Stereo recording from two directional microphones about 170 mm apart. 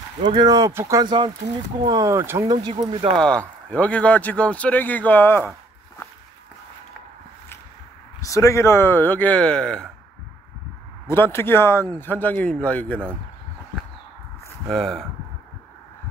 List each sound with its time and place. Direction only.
0.2 s speech: 35° right (ahead or behind)
0.5 s speech: 20° right (ahead or behind)
3.2 s speech: 5° left (ahead or behind)
8.2 s speech: 20° left (ahead or behind)
11.1 s speech: 15° left (ahead or behind)
14.7 s speech: 5° left (ahead or behind)